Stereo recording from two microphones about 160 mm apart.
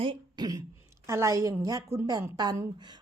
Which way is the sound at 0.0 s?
30° right (ahead or behind).